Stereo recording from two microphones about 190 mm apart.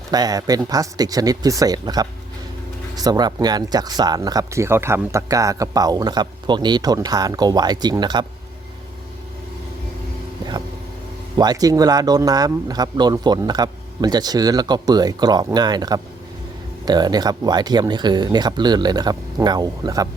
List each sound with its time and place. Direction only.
0.1 s speech: 20° right (ahead or behind)
11.3 s speech: 20° right (ahead or behind)